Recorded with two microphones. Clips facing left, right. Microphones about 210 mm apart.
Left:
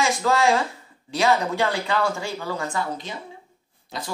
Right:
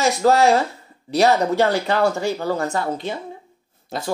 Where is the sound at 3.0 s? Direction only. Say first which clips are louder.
Right 7 dB; 55° right (ahead or behind).